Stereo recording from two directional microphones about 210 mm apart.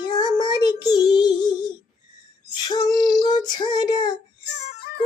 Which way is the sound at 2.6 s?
20° left (ahead or behind).